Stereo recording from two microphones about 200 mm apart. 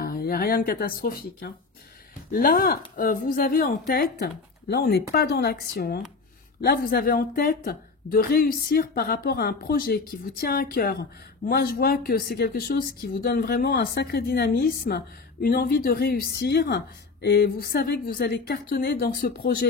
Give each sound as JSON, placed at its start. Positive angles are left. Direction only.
{"t": 0.0, "sound": "a woman's voice", "side_deg": 50}